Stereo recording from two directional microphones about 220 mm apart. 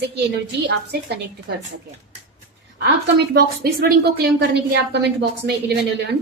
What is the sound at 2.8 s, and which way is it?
A woman's voice, 45° right (ahead or behind).